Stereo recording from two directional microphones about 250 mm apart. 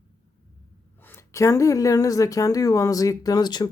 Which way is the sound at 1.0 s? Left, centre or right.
Centre.